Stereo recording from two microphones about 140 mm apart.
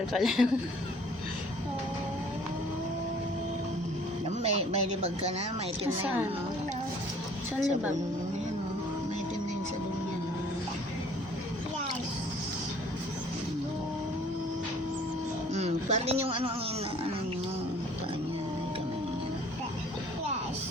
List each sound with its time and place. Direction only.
0.1 s speech: centre (ahead or behind)
4.3 s speech: 55° right (ahead or behind)
7.6 s a woman's voice: 10° right (ahead or behind)
15.5 s a sound: 50° right (ahead or behind)